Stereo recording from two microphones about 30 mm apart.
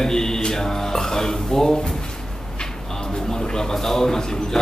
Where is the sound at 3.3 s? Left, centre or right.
Centre.